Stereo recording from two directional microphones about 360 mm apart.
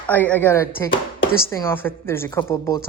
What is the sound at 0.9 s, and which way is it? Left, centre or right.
Speech, left.